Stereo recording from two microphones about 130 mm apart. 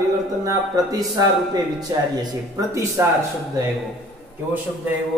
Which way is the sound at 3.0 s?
20° right (ahead or behind).